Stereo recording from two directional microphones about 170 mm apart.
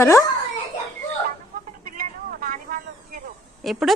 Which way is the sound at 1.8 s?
55° right (ahead or behind).